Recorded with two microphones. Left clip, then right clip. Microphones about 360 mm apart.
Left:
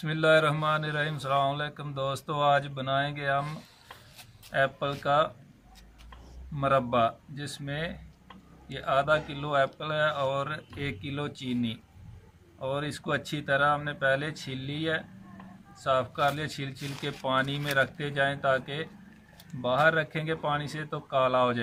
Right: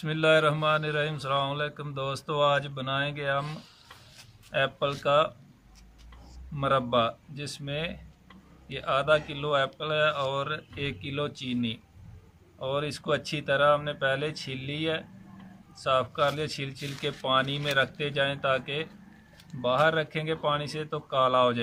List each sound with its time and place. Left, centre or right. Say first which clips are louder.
0.0 s speech: even; centre
6.6 s speech: even; centre